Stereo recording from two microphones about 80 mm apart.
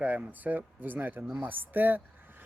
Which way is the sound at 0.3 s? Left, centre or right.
Right.